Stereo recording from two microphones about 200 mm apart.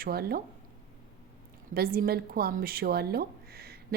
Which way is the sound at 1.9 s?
50° right (ahead or behind).